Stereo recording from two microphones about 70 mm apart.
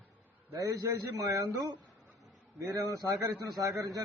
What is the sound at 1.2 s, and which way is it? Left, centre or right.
A man's voice, right.